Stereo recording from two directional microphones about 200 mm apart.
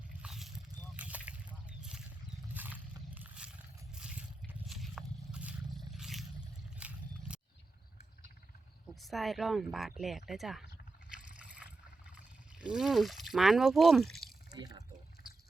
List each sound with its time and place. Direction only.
0.2 s a sound: centre (ahead or behind)
2.6 s roaring cats: 10° right (ahead or behind)
3.9 s drip: 5° right (ahead or behind)
4.7 s biting: centre (ahead or behind)
6.7 s a sound: 5° right (ahead or behind)
9.0 s speech: centre (ahead or behind)
11.3 s boat: 5° right (ahead or behind)
12.5 s speech: 5° right (ahead or behind)
14.5 s speech: 20° right (ahead or behind)